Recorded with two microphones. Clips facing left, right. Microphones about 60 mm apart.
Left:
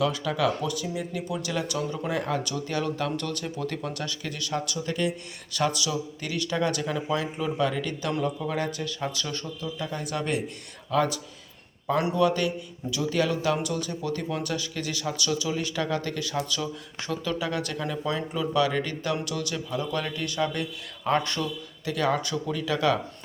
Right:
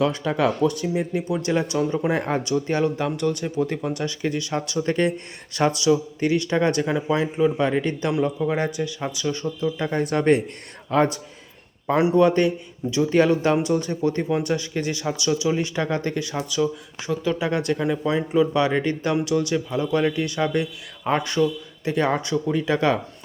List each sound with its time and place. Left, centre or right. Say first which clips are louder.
0.0 s a man's voice: right 4 dB; right; by 9.6 s centre
9.7 s a man's voice: right 6 dB; right; by 21.5 s centre
21.8 s speech: right 4 dB; right